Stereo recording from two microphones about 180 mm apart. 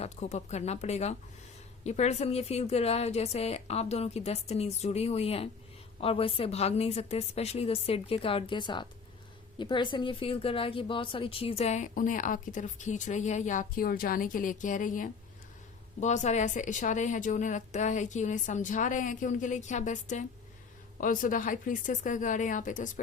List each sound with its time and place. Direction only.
0.0 s speech: 40° left (ahead or behind)